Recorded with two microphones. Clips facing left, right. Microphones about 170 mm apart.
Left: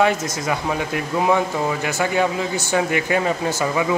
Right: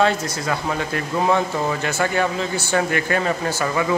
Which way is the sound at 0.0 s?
15° left (ahead or behind).